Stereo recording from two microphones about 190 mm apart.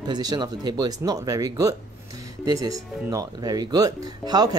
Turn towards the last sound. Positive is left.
turn(degrees=-20)  # may be behind; listen again after turning